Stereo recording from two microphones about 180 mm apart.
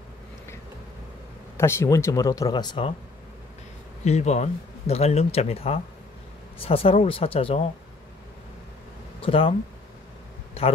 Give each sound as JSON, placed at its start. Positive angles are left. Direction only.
{"t": 1.6, "sound": "speech", "side_deg": 15}
{"t": 4.0, "sound": "speech", "side_deg": 40}
{"t": 9.2, "sound": "speech", "side_deg": 30}